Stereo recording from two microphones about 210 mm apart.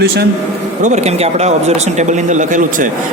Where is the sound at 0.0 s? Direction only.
50° right (ahead or behind).